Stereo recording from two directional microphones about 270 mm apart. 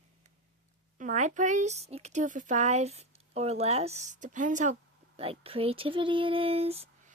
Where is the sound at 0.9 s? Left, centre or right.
Right.